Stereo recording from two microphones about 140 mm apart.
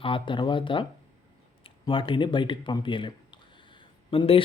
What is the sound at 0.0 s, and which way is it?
Mantra, 35° left (ahead or behind).